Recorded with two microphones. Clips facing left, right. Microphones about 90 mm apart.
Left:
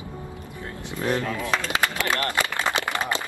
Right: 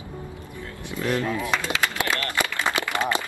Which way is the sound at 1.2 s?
20° right (ahead or behind).